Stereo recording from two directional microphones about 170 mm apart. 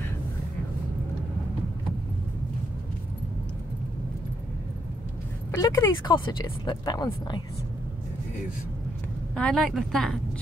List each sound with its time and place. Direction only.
5.5 s speech: 20° left (ahead or behind)
9.3 s a woman's voice: 5° left (ahead or behind)